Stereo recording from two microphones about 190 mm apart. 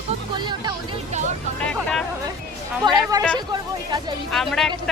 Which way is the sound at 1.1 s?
40° right (ahead or behind).